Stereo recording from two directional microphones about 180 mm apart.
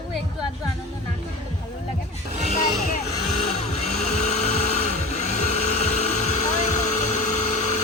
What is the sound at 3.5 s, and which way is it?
Vehicle, 35° left (ahead or behind).